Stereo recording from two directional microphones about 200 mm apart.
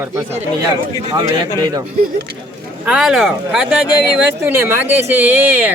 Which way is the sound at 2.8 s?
5° right (ahead or behind).